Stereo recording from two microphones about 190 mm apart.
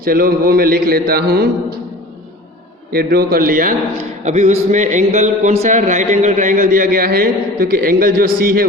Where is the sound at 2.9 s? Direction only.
55° right (ahead or behind).